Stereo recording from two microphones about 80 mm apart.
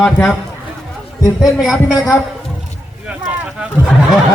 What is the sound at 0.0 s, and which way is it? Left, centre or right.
Speech, centre.